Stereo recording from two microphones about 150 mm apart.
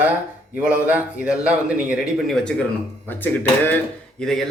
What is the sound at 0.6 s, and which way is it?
A man's voice, 10° right (ahead or behind).